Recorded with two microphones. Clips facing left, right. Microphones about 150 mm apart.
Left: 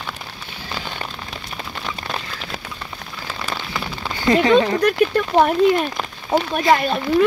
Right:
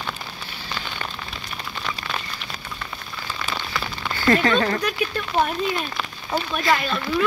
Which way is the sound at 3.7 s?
20° left (ahead or behind).